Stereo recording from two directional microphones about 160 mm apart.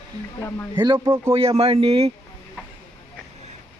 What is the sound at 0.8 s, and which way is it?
Speech, 20° right (ahead or behind).